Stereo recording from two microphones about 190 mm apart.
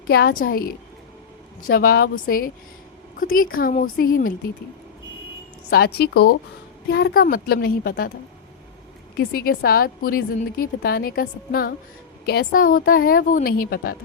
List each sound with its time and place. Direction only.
0.1 s a woman's voice: 55° left (ahead or behind)
5.7 s a woman's voice: 55° left (ahead or behind)
9.1 s a woman's voice: 50° left (ahead or behind)